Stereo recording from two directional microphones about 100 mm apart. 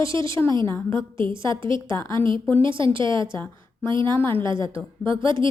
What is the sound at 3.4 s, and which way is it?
A woman's voice, 20° left (ahead or behind).